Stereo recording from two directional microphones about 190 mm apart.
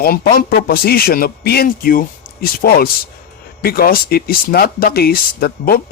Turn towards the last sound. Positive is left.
turn(degrees=50)  # may be behind; listen again after turning